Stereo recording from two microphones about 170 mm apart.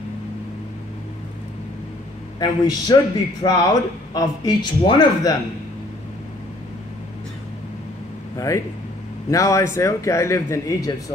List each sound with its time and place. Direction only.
2.4 s speech: 20° left (ahead or behind)
9.3 s a man's voice: 20° left (ahead or behind)